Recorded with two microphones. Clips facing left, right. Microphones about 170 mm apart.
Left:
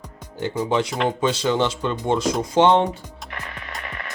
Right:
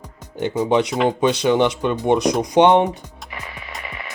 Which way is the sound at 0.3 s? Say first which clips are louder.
Right 4 dB; 15° right (ahead or behind).